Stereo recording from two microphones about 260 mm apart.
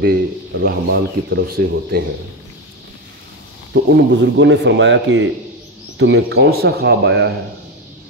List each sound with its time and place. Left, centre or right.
0.0 s speech: right
3.7 s speech: right